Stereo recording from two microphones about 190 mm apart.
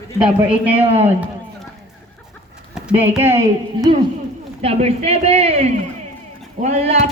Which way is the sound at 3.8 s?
25° right (ahead or behind).